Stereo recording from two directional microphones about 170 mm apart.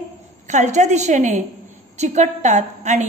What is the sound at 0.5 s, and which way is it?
A woman's voice, 45° right (ahead or behind).